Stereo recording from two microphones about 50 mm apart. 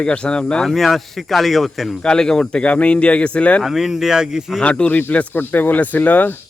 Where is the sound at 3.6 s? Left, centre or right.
Centre.